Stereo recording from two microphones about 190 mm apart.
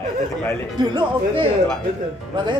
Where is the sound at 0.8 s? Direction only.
20° right (ahead or behind).